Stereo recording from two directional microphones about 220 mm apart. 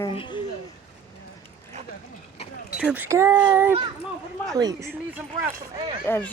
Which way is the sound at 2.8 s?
5° right (ahead or behind).